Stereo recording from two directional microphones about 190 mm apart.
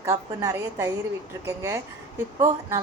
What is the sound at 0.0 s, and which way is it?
A woman's voice, 15° right (ahead or behind).